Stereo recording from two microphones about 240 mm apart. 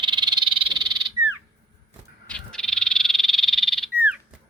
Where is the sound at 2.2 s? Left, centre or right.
Centre.